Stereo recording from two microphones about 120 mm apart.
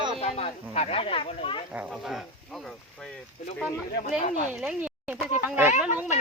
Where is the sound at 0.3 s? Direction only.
60° left (ahead or behind).